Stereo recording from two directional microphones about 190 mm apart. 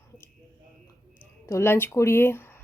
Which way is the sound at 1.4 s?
15° left (ahead or behind).